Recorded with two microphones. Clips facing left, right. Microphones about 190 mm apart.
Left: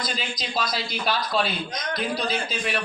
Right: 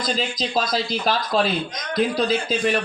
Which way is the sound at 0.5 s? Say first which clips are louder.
Right 4 dB; 45° right (ahead or behind).